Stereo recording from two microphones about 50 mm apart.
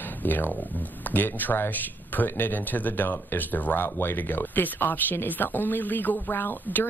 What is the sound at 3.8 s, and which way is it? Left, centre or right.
Speech, left.